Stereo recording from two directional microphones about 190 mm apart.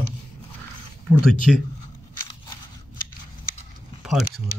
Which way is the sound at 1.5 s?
Centre (ahead or behind).